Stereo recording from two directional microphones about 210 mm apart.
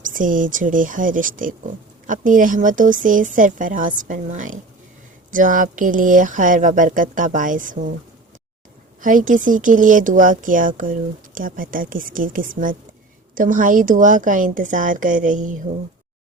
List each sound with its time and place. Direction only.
0.0 s speech: 40° right (ahead or behind)
9.0 s speech: 40° right (ahead or behind)